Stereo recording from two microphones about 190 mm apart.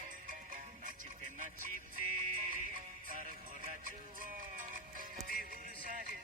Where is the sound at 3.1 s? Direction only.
45° right (ahead or behind).